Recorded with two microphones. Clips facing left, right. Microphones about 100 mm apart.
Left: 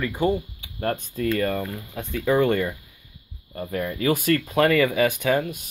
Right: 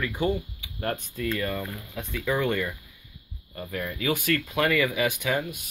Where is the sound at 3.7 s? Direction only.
35° left (ahead or behind).